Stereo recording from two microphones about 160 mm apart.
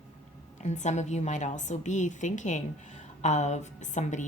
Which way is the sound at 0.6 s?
45° left (ahead or behind).